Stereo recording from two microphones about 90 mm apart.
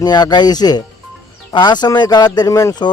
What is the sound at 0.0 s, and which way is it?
Speech, 50° left (ahead or behind).